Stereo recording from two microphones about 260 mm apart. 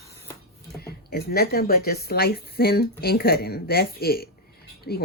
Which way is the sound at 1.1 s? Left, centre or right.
Left.